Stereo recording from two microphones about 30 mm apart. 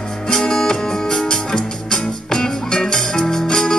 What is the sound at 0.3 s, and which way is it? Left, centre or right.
Music, left.